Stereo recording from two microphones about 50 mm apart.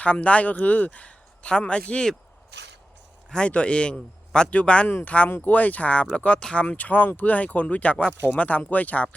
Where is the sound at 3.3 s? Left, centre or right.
Left.